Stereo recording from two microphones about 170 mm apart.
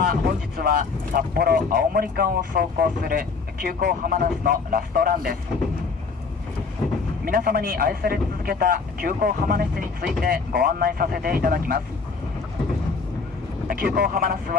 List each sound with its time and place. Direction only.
0.1 s speech: 60° right (ahead or behind)
7.2 s speech: 60° right (ahead or behind)
13.7 s speech: 60° right (ahead or behind)